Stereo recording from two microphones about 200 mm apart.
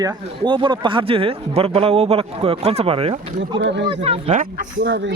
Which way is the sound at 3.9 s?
30° right (ahead or behind).